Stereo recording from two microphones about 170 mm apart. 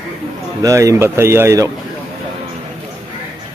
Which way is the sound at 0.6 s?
20° right (ahead or behind).